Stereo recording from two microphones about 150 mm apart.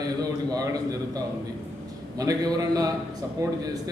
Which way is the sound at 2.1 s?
25° right (ahead or behind).